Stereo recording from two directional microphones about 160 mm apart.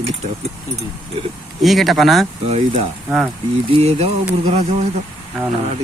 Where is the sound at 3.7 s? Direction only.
40° right (ahead or behind).